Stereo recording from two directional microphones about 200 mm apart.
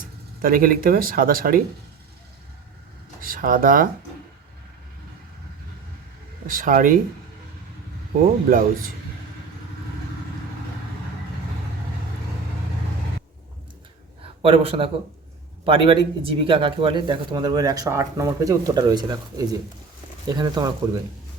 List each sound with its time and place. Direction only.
0.4 s speech: 45° right (ahead or behind)
3.2 s speech: 45° right (ahead or behind)
6.5 s speech: 40° right (ahead or behind)
8.4 s speech: 45° right (ahead or behind)
14.4 s speech: 30° right (ahead or behind)